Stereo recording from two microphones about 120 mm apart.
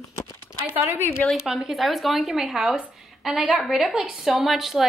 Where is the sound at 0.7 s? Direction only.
20° right (ahead or behind).